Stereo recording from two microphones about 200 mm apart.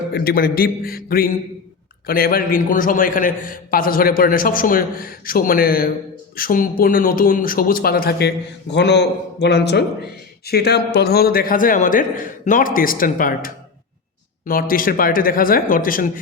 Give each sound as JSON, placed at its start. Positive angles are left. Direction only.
{"t": 0.1, "sound": "a man's voice", "side_deg": 50}
{"t": 8.7, "sound": "a man's voice", "side_deg": 60}